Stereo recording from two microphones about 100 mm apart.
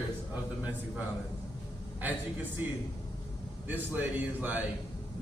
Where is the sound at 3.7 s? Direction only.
15° right (ahead or behind).